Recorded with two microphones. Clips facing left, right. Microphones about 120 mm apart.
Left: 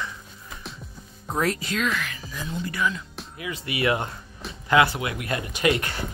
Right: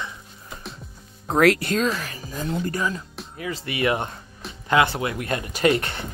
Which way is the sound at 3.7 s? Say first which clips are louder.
Right 1 dB; 25° right (ahead or behind).